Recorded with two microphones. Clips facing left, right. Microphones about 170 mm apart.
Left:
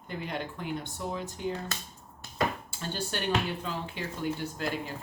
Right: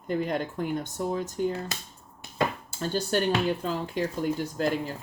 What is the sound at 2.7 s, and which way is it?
Speech, 40° right (ahead or behind).